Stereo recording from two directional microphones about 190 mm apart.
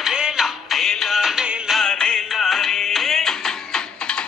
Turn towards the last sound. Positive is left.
turn(degrees=5)  # may be behind; listen again after turning